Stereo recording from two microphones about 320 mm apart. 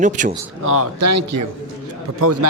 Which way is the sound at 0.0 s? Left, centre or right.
Right.